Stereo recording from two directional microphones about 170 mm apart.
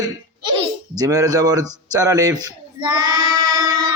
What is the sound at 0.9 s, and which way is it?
A man's voice, 20° right (ahead or behind).